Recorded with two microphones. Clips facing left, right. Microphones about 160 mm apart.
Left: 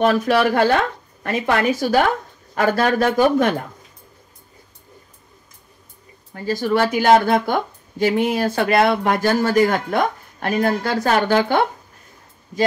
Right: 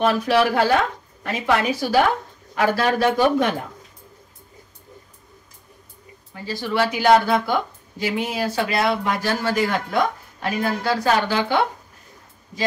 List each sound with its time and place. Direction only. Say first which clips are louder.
0.0 s speech: left 2 dB; 50° left (ahead or behind)
6.3 s speech: left 4 dB; 45° left (ahead or behind)